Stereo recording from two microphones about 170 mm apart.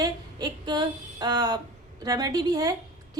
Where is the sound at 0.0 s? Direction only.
25° right (ahead or behind).